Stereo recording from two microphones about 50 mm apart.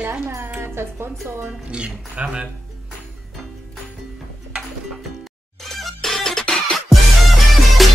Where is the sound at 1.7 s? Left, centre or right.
Right.